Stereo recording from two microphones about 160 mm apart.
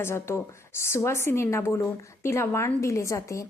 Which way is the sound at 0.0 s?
15° left (ahead or behind).